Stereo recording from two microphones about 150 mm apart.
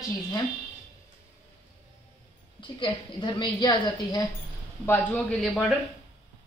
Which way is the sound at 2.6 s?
30° left (ahead or behind).